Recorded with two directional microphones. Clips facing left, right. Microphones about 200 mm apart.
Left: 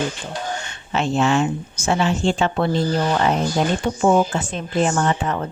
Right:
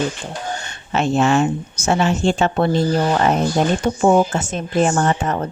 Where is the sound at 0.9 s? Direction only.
45° right (ahead or behind).